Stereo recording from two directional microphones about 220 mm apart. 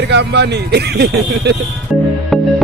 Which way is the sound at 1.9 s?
Centre (ahead or behind).